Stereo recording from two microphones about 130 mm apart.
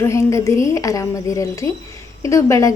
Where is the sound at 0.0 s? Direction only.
20° left (ahead or behind).